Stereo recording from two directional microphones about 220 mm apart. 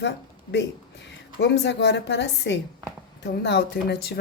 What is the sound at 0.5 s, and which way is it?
A woman's voice, 50° left (ahead or behind).